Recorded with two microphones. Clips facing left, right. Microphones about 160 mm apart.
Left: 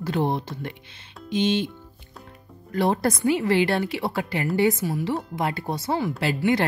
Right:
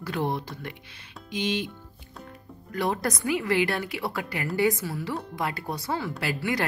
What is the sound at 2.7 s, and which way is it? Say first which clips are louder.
A woman's voice: left 5 dB; 30° left (ahead or behind).